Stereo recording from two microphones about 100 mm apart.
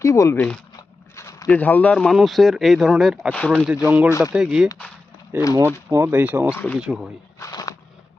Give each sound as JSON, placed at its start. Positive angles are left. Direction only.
{"t": 0.0, "sound": "speech", "side_deg": 30}
{"t": 0.3, "sound": "speech", "side_deg": 10}
{"t": 1.1, "sound": "a sound", "side_deg": 30}
{"t": 1.5, "sound": "speech", "side_deg": 20}
{"t": 2.1, "sound": "speech", "side_deg": 0}
{"t": 3.3, "sound": "speech", "side_deg": 10}
{"t": 3.8, "sound": "speech", "side_deg": -15}
{"t": 5.3, "sound": "speech", "side_deg": -20}
{"t": 6.1, "sound": "speech", "side_deg": -15}
{"t": 6.7, "sound": "speech", "side_deg": -5}
{"t": 7.3, "sound": "a sound", "side_deg": 35}